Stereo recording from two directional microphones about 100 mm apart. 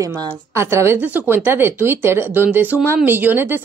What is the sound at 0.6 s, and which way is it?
A woman's voice, 25° right (ahead or behind).